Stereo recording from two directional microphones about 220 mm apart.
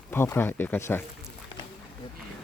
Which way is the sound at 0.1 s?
10° left (ahead or behind).